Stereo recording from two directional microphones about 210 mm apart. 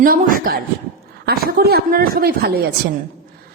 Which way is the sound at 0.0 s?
40° right (ahead or behind).